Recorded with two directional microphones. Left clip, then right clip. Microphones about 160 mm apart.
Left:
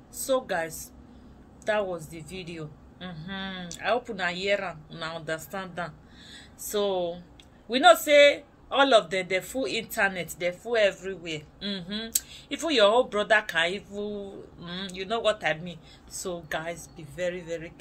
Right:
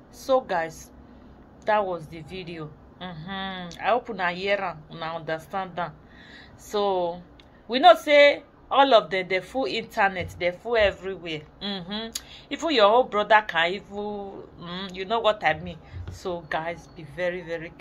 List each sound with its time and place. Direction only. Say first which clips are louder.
1.7 s speech: right 4 dB; 20° left (ahead or behind)